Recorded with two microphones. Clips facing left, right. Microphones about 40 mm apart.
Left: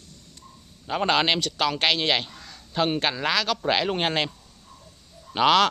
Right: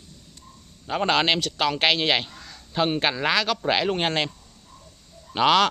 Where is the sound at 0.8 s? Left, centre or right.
Centre.